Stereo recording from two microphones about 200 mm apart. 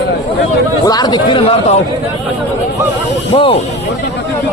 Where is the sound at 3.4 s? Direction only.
30° left (ahead or behind).